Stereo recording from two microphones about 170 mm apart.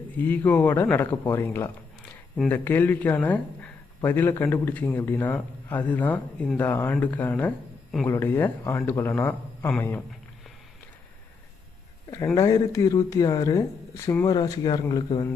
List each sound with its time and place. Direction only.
0.2 s a man's voice: 10° left (ahead or behind)
12.1 s speech: 20° left (ahead or behind)